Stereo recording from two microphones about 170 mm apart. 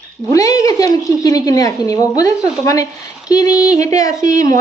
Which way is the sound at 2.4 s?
5° right (ahead or behind).